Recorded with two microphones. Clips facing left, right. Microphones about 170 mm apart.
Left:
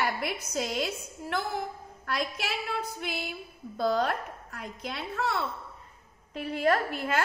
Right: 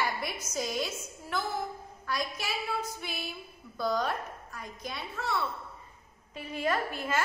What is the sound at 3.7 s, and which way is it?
A woman's voice, 60° left (ahead or behind).